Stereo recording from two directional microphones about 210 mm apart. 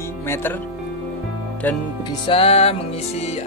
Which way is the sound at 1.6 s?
10° left (ahead or behind).